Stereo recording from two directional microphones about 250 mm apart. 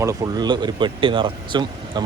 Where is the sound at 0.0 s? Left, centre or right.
Centre.